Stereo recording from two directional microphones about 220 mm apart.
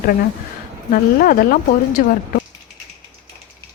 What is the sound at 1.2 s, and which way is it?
Speech, 40° left (ahead or behind).